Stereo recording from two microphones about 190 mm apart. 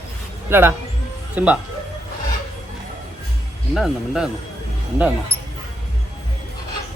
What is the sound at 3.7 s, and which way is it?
Speech, centre (ahead or behind).